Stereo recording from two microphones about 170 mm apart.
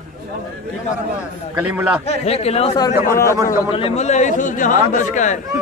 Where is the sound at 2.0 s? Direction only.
35° left (ahead or behind).